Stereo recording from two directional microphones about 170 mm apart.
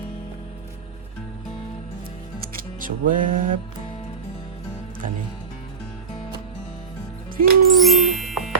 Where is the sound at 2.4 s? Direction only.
55° right (ahead or behind).